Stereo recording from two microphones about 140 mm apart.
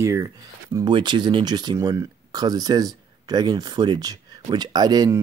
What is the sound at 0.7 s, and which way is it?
Speech, 35° right (ahead or behind).